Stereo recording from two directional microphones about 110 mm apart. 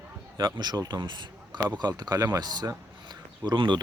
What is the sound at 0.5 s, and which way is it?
Speech, 40° right (ahead or behind).